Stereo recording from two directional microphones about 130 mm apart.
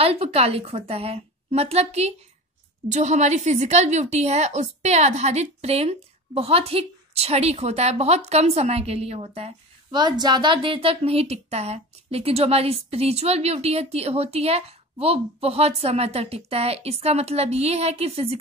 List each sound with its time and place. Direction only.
0.0 s a woman's voice: 50° right (ahead or behind)